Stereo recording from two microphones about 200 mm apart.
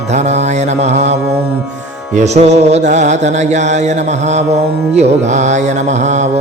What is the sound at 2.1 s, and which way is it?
Mantra, 35° right (ahead or behind).